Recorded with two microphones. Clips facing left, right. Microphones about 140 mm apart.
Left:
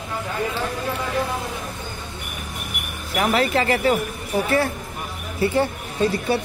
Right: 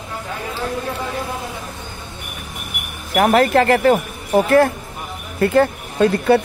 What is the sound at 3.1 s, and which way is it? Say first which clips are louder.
A woman's voice: right 6 dB; 50° right (ahead or behind).